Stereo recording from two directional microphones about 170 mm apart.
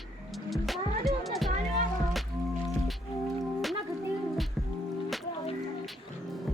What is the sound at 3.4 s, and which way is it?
Music, centre (ahead or behind).